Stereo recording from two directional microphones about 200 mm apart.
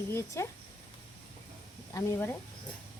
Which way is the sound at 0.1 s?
15° left (ahead or behind).